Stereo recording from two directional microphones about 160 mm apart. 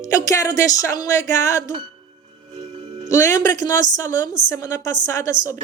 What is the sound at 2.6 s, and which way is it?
Music, 40° right (ahead or behind).